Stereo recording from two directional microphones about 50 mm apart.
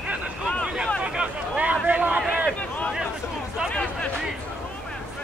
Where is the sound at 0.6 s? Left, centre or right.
Centre; by 2.2 s right.